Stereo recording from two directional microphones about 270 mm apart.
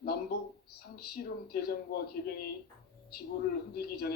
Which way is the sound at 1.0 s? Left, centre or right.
Left.